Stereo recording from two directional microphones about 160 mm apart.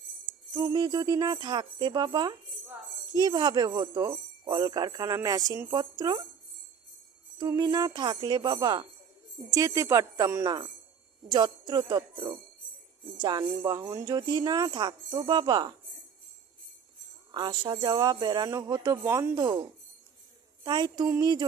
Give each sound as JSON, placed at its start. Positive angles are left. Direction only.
{"t": 0.5, "sound": "speech", "side_deg": -25}
{"t": 7.3, "sound": "speech", "side_deg": -20}
{"t": 17.3, "sound": "speech", "side_deg": -25}
{"t": 20.7, "sound": "speech", "side_deg": -25}